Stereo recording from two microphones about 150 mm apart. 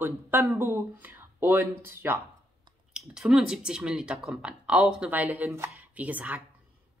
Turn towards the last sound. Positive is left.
turn(degrees=-10)  # may be behind; listen again after turning